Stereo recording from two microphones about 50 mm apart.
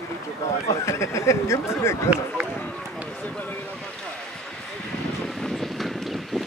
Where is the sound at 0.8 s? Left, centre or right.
Left.